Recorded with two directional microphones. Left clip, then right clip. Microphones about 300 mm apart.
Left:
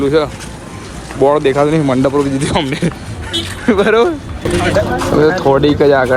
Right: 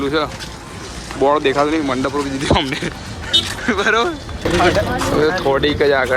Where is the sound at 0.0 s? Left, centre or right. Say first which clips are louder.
Left 6 dB; centre.